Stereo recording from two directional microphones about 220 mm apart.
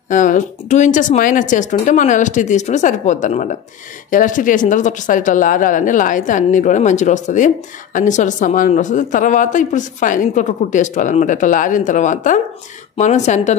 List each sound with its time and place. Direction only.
0.1 s speech: 35° left (ahead or behind)